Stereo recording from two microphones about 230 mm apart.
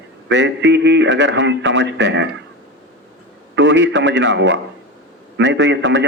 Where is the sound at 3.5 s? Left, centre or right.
Right.